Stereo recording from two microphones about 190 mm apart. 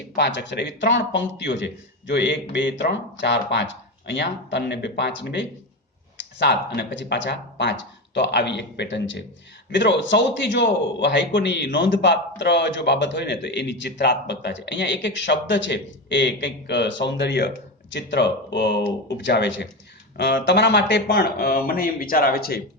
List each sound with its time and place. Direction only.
0.2 s a man's voice: 70° left (ahead or behind); by 22.6 s 55° left (ahead or behind)